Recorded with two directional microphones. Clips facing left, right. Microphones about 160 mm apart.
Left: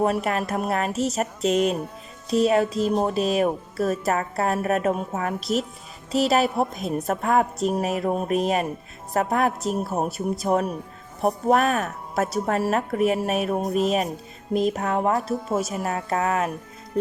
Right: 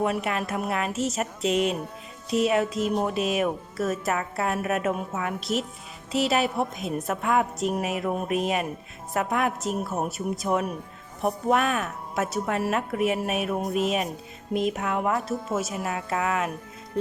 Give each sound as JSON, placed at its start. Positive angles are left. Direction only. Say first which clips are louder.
{"t": 0.0, "sound": "speech", "louder": "left 3 dB", "side_deg": 40}